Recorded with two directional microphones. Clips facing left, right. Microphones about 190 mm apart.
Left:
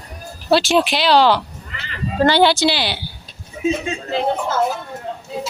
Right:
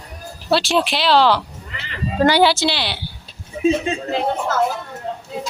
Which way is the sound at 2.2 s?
15° right (ahead or behind).